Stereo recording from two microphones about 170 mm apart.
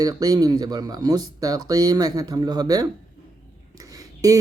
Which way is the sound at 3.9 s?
20° right (ahead or behind).